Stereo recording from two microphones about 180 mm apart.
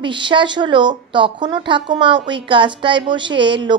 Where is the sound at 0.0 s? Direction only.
25° right (ahead or behind).